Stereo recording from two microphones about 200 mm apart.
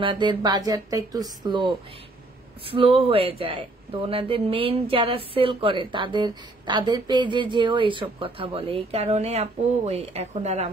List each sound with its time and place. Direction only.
0.0 s speech: 25° right (ahead or behind)